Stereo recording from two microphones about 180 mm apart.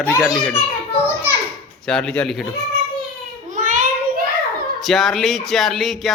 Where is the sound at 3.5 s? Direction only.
45° right (ahead or behind).